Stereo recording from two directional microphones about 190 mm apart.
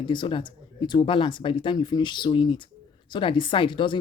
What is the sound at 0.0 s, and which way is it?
Speech, 25° left (ahead or behind).